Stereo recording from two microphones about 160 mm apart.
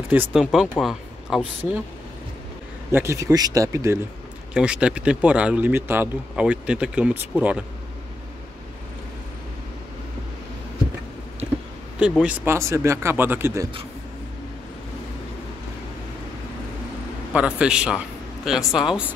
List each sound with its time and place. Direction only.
0.1 s speech: 5° right (ahead or behind)
2.9 s speech: 15° right (ahead or behind)
4.6 s speech: 5° right (ahead or behind)
12.2 s speech: 10° right (ahead or behind)
17.3 s a man's voice: 5° right (ahead or behind)